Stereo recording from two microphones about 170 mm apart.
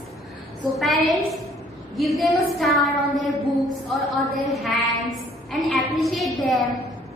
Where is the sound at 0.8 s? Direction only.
Centre (ahead or behind).